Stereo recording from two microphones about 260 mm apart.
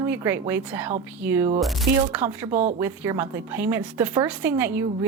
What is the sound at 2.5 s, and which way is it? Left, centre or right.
Speech, right.